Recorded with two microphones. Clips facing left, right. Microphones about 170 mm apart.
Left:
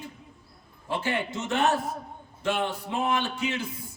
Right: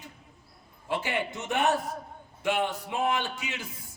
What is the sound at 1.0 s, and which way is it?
A man's voice, 15° right (ahead or behind).